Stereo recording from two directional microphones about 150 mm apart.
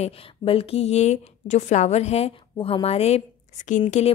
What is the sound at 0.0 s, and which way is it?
A woman's voice, 40° left (ahead or behind).